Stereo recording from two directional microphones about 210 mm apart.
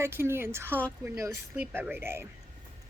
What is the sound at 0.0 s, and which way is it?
A woman's voice, 10° right (ahead or behind).